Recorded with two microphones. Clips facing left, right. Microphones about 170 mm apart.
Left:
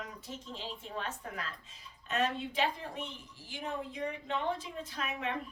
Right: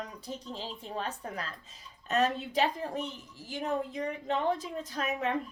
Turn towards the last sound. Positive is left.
turn(degrees=-40)  # may be behind; listen again after turning